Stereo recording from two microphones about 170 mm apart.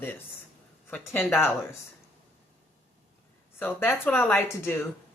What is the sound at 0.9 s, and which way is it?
Speech, 10° left (ahead or behind).